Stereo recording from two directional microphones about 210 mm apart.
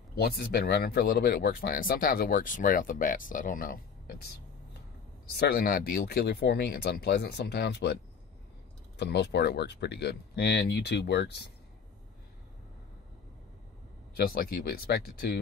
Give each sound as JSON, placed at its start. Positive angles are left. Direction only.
{"t": 0.1, "sound": "speech", "side_deg": 50}
{"t": 5.4, "sound": "speech", "side_deg": 45}
{"t": 14.1, "sound": "speech", "side_deg": 45}